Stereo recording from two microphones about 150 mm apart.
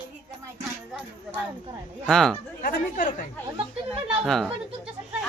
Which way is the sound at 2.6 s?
65° left (ahead or behind).